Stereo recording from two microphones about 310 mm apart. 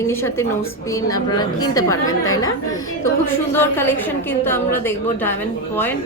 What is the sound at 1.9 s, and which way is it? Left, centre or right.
Speech, left.